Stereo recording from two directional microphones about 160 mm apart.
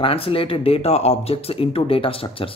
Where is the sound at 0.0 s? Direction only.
35° left (ahead or behind).